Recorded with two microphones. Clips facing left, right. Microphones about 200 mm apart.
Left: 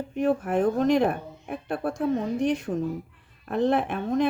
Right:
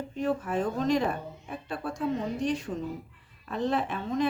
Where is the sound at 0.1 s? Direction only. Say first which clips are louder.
Left 6 dB; 60° left (ahead or behind).